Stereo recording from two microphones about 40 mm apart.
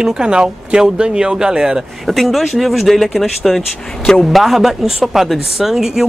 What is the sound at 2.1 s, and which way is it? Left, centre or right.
Speech, centre.